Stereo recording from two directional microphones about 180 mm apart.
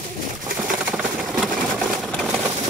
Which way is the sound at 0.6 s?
5° right (ahead or behind).